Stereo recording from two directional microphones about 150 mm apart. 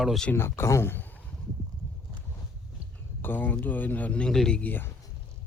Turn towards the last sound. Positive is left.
turn(degrees=10)  # may be behind; listen again after turning